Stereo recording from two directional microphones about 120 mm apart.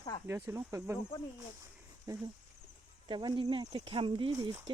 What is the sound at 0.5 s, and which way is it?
Speech, 25° right (ahead or behind).